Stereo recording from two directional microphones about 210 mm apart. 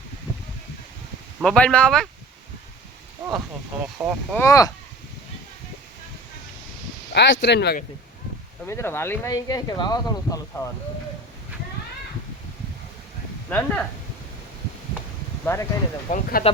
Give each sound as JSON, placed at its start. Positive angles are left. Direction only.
{"t": 1.4, "sound": "speech", "side_deg": 5}
{"t": 4.0, "sound": "speech", "side_deg": -15}
{"t": 4.4, "sound": "speech", "side_deg": 15}
{"t": 7.1, "sound": "speech", "side_deg": 55}
{"t": 8.6, "sound": "speech", "side_deg": 10}
{"t": 13.5, "sound": "speech", "side_deg": 5}
{"t": 15.5, "sound": "speech", "side_deg": 10}
{"t": 16.0, "sound": "speech", "side_deg": 35}